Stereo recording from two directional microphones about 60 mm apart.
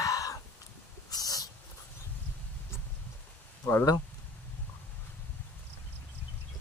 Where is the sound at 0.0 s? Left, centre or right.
Left.